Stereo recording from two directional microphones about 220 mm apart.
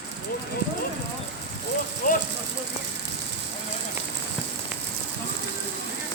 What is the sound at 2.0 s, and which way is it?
Vehicle, 40° left (ahead or behind).